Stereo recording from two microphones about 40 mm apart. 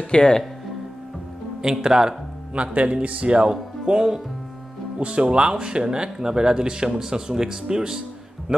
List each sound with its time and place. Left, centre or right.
0.1 s speech: left
1.6 s speech: centre
2.5 s speech: right; by 8.6 s centre